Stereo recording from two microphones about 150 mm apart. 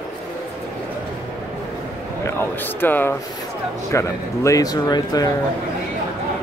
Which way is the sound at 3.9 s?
20° left (ahead or behind).